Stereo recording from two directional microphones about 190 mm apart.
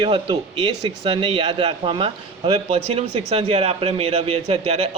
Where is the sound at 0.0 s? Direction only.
30° right (ahead or behind).